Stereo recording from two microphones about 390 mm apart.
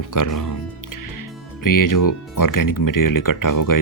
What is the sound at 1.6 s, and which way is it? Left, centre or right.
Speech, left.